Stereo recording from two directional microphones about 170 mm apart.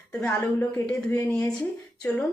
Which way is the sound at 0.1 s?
5° left (ahead or behind).